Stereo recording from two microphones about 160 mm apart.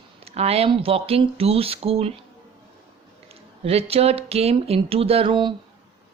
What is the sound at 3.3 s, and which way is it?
Speech, 40° right (ahead or behind).